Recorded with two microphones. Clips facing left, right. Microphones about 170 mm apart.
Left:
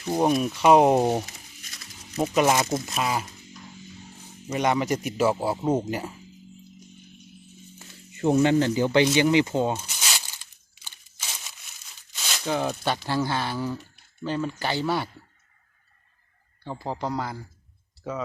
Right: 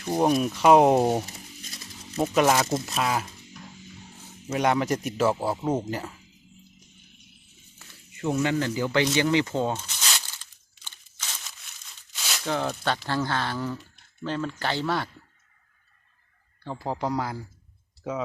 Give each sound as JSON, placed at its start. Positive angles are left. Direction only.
{"t": 0.0, "sound": "speech", "side_deg": 0}
{"t": 4.5, "sound": "speech", "side_deg": 0}
{"t": 8.1, "sound": "speech", "side_deg": 35}
{"t": 9.1, "sound": "a sound", "side_deg": 15}
{"t": 10.8, "sound": "crunch", "side_deg": 10}
{"t": 12.1, "sound": "speech", "side_deg": 0}
{"t": 16.6, "sound": "speech", "side_deg": -5}